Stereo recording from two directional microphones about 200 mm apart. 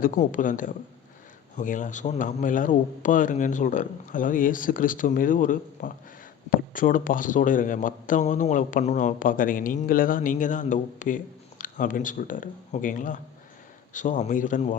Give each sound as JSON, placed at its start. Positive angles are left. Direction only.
{"t": 0.0, "sound": "speech", "side_deg": 40}